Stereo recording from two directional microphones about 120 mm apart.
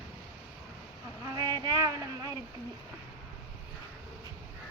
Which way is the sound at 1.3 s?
30° right (ahead or behind).